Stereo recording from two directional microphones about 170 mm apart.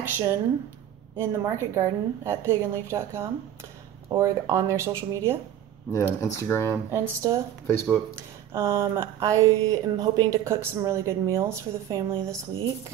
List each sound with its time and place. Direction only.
0.1 s speech: 15° right (ahead or behind)
5.9 s speech: 15° left (ahead or behind)
6.9 s speech: 20° right (ahead or behind)
7.6 s speech: 10° left (ahead or behind)
8.2 s speech: 15° right (ahead or behind)